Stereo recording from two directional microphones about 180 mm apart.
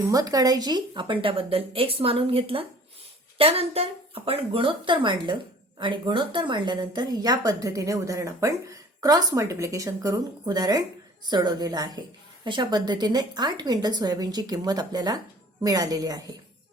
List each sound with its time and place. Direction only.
0.1 s a woman's voice: 20° right (ahead or behind)